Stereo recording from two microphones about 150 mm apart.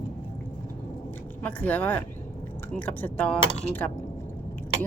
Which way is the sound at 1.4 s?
10° left (ahead or behind).